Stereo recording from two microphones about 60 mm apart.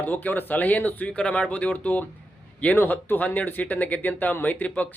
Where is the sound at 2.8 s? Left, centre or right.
Left.